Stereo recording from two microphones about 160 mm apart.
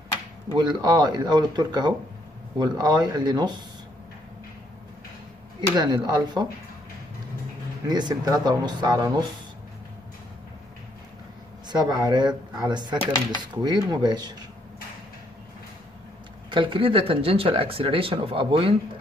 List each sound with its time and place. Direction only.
0.6 s speech: 25° right (ahead or behind)
5.8 s speech: 25° right (ahead or behind)
7.9 s speech: 25° right (ahead or behind)
11.7 s speech: 25° right (ahead or behind)
16.4 s speech: 30° right (ahead or behind)